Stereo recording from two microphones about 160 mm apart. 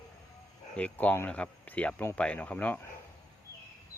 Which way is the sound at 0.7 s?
10° left (ahead or behind).